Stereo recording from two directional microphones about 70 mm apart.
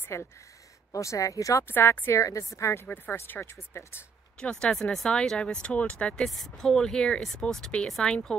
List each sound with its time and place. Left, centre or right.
0.1 s speech: left
1.7 s speech: left
2.2 s speech: left
4.4 s speech: centre
6.2 s speech: centre